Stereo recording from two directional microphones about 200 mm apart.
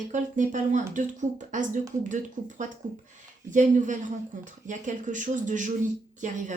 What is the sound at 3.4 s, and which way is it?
Speech, 40° right (ahead or behind).